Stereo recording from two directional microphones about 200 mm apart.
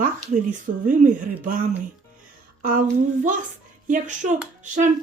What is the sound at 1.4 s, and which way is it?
Music, 45° right (ahead or behind).